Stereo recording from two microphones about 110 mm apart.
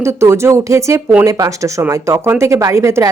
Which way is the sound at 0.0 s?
25° right (ahead or behind).